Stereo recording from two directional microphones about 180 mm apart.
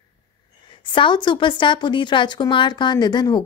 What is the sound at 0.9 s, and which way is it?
Speech, 25° left (ahead or behind).